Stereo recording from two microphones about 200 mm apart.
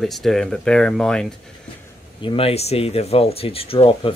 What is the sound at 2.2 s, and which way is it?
Speech, 25° left (ahead or behind).